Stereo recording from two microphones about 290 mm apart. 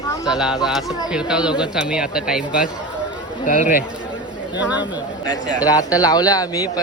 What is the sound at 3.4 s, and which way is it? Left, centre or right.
Speech, left.